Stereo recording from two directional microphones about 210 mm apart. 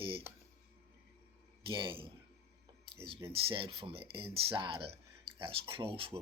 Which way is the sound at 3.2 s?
25° right (ahead or behind).